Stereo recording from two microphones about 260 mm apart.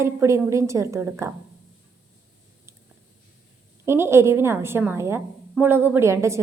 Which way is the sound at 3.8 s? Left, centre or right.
Centre.